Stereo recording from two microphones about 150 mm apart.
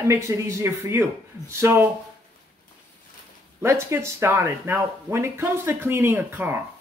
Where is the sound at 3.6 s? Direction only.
20° right (ahead or behind).